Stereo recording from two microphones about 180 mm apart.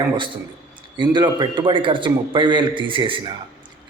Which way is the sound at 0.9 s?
25° right (ahead or behind).